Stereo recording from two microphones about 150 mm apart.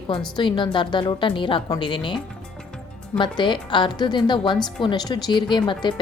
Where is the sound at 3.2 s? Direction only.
30° left (ahead or behind).